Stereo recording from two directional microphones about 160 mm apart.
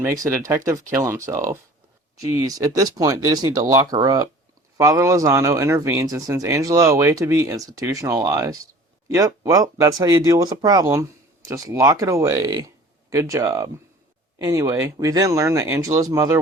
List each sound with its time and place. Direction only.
0.0 s speech: 20° right (ahead or behind)